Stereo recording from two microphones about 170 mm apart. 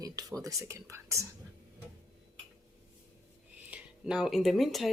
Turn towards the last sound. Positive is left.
turn(degrees=0)  # may be behind; listen again after turning